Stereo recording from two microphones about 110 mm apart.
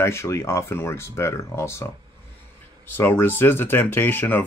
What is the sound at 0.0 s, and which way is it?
Speech, 25° left (ahead or behind).